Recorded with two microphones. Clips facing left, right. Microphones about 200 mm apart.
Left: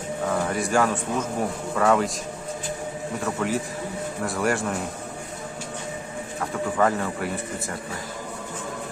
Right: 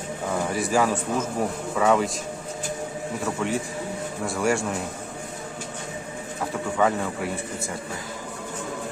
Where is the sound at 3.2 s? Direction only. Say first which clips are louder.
Left 1 dB; centre (ahead or behind).